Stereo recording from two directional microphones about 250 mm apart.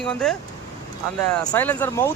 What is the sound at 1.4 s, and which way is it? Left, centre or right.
Speech, centre.